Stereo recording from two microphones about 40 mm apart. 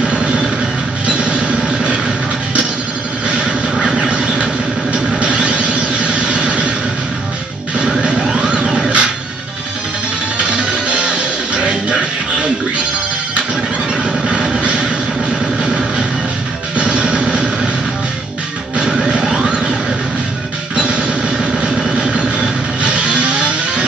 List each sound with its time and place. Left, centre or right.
0.1 s vehicle: right
1.0 s train: right
3.3 s vehicle: right
8.0 s music: right
10.6 s music: right
14.0 s vehicle: right
16.7 s music: right
19.0 s a sound: centre
20.7 s music: right